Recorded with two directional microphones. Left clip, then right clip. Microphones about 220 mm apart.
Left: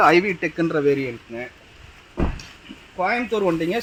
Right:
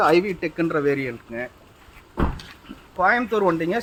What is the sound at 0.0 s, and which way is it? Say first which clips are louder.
Speech: left 3 dB; 30° left (ahead or behind).